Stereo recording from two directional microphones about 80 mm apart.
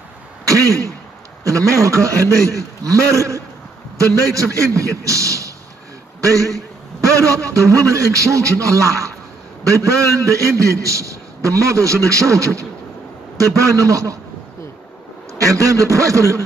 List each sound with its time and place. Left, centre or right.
0.5 s a man's voice: right
7.2 s a man's voice: right
15.4 s a man's voice: right